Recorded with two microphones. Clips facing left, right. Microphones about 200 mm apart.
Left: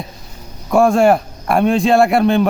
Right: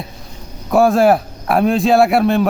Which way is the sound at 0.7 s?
Centre (ahead or behind).